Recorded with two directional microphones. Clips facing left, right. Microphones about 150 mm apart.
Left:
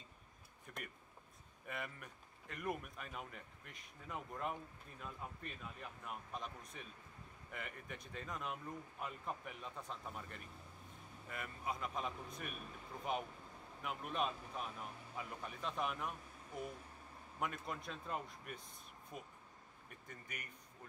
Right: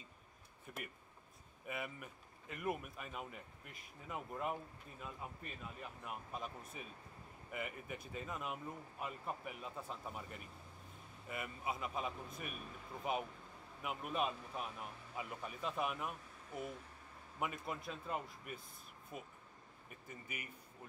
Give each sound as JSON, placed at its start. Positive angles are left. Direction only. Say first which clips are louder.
{"t": 0.7, "sound": "a sound", "louder": "right 2 dB", "side_deg": -5}
{"t": 1.7, "sound": "speech", "louder": "right 2 dB", "side_deg": -5}
{"t": 13.8, "sound": "speech", "louder": "right 1 dB", "side_deg": -5}